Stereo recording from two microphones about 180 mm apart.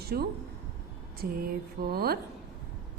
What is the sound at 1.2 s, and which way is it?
Speech, 50° right (ahead or behind).